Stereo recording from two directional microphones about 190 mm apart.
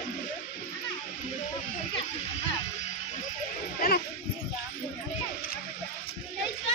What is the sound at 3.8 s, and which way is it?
Speech, 55° left (ahead or behind).